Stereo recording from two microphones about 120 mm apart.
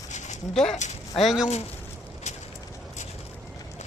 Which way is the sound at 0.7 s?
70° left (ahead or behind).